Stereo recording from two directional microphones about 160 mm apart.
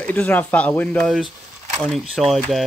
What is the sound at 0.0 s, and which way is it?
Speech, 10° left (ahead or behind).